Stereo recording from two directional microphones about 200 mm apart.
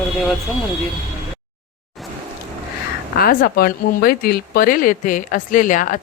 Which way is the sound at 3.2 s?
50° left (ahead or behind).